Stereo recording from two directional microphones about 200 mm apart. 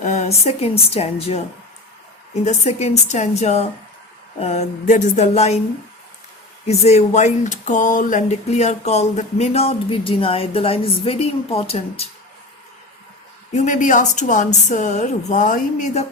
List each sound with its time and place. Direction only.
0.0 s speech: 35° left (ahead or behind)
6.7 s speech: 35° left (ahead or behind)
13.5 s speech: 35° left (ahead or behind)